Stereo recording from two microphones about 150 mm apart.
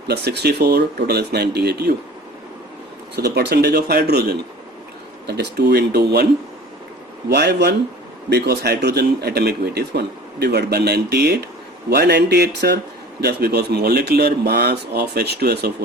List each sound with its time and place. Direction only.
0.1 s speech: 90° right
3.2 s speech: 90° right
7.3 s speech: 90° right